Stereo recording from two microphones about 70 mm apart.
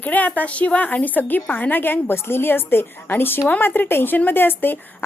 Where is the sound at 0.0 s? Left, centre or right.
Left.